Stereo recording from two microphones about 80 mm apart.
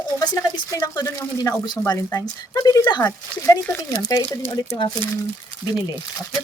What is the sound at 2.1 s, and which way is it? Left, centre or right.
Speech, left.